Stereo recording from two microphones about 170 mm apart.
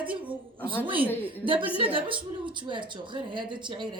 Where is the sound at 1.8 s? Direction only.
30° right (ahead or behind).